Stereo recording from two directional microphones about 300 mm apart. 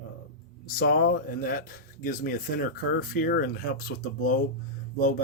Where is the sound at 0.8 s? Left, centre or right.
Left.